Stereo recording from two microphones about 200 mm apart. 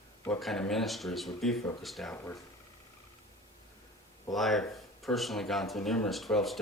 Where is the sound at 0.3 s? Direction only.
Centre (ahead or behind).